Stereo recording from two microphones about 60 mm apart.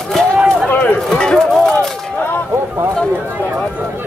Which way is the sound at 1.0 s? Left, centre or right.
Centre.